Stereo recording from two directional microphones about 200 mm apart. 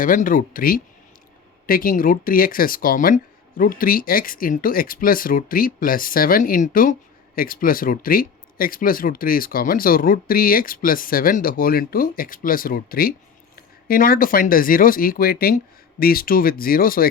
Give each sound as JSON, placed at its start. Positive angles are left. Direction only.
{"t": 0.0, "sound": "speech", "side_deg": 40}